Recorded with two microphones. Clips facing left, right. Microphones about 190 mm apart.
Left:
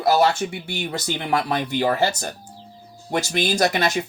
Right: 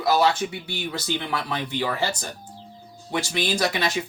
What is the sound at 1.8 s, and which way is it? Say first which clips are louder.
Speech: left 6 dB; 45° left (ahead or behind).